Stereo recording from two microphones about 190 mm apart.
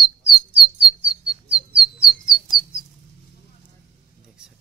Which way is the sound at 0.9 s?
5° right (ahead or behind).